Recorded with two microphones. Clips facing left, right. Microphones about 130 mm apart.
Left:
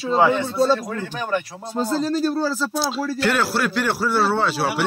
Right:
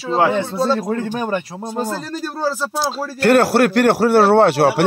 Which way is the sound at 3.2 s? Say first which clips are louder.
Right 10 dB; 55° right (ahead or behind).